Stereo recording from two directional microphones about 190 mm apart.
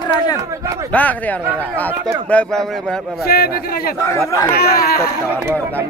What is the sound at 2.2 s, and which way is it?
Speech, 5° left (ahead or behind).